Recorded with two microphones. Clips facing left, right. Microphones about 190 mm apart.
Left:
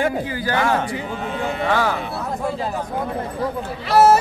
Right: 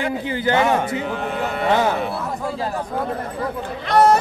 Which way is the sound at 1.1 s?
55° right (ahead or behind).